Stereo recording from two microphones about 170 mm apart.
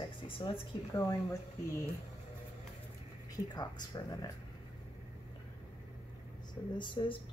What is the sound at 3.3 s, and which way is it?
Speech, 25° left (ahead or behind).